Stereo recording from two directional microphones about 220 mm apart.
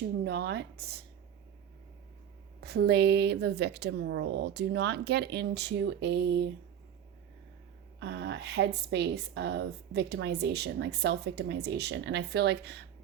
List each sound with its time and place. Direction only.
0.3 s a woman's voice: 45° right (ahead or behind)
2.6 s a woman's voice: 45° right (ahead or behind)
7.9 s a woman's voice: 50° right (ahead or behind)